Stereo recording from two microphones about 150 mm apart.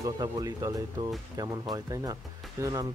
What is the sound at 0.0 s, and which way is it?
Speech, 25° right (ahead or behind).